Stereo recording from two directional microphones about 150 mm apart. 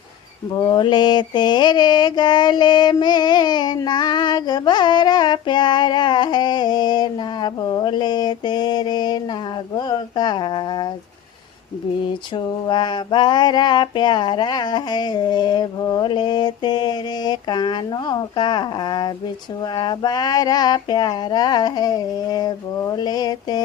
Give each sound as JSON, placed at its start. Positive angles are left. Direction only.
{"t": 0.5, "sound": "mantra", "side_deg": 30}
{"t": 12.6, "sound": "mantra", "side_deg": 30}